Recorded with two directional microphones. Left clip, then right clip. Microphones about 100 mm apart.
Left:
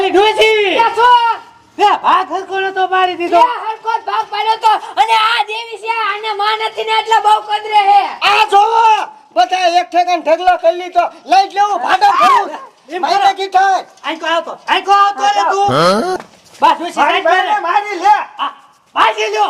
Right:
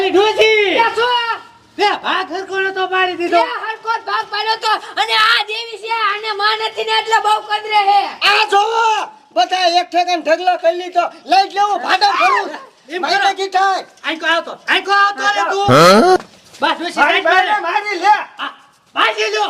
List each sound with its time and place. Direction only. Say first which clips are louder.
0.0 s a sound: left 2 dB; 25° right (ahead or behind)
0.3 s a sound: left 1 dB; 30° left (ahead or behind)
0.7 s a man's voice: left 5 dB; 25° right (ahead or behind)
13.2 s a man's voice: left 5 dB; 20° right (ahead or behind)
14.0 s a man's voice: even; 40° right (ahead or behind)
15.7 s speech: right 4 dB; centre (ahead or behind)
16.6 s a man's voice: left 3 dB; 35° right (ahead or behind)